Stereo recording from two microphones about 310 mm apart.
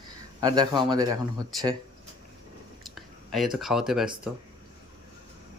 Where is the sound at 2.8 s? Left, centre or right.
Centre.